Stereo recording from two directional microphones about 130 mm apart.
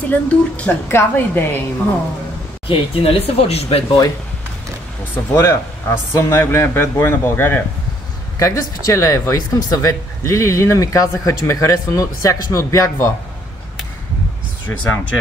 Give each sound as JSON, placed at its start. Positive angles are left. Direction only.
{"t": 0.1, "sound": "a woman's voice", "side_deg": 10}
{"t": 2.7, "sound": "speech", "side_deg": 45}
{"t": 5.3, "sound": "speech", "side_deg": 20}
{"t": 14.7, "sound": "a woman's voice", "side_deg": 10}